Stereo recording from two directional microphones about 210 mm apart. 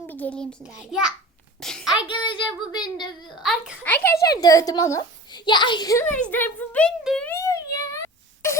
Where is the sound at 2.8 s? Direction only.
20° left (ahead or behind).